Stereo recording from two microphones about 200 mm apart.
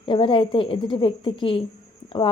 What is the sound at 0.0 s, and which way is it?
Speech, 25° left (ahead or behind).